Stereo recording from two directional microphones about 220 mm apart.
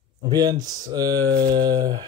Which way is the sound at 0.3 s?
15° right (ahead or behind).